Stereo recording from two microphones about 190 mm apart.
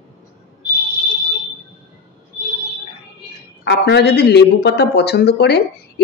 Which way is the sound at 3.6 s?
65° left (ahead or behind).